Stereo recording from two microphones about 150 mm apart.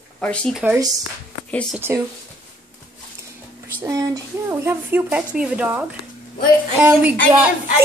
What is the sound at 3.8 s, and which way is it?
A woman's voice, 20° right (ahead or behind).